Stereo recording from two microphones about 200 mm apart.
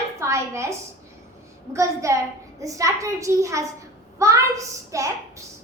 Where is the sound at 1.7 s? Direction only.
15° right (ahead or behind).